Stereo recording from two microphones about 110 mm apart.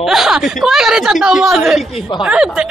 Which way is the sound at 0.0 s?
5° right (ahead or behind).